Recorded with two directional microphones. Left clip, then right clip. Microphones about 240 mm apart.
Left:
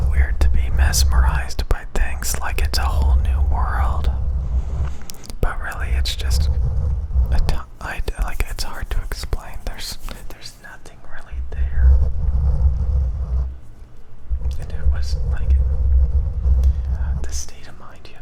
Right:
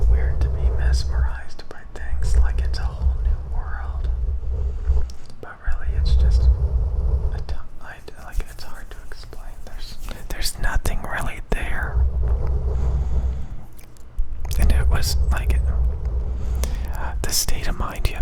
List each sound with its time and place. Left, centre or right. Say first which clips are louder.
0.1 s whispering: left 4 dB; left
5.4 s whispering: left 10 dB; left
10.3 s whispering: right 10 dB; right
14.5 s whispering: right 9 dB; right
16.6 s whispering: right 4 dB; right